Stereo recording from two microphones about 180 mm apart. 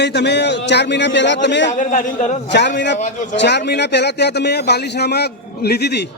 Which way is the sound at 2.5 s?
75° left (ahead or behind).